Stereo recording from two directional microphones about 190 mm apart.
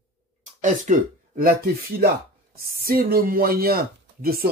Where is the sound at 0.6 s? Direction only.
40° right (ahead or behind).